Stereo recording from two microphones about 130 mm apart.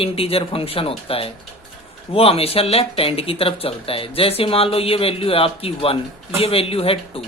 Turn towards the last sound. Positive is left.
turn(degrees=45)  # may be behind; listen again after turning